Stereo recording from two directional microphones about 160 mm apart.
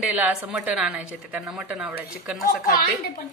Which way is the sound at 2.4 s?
60° left (ahead or behind).